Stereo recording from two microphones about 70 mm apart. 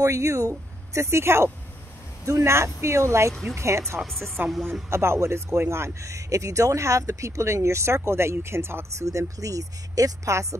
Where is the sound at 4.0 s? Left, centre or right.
Centre.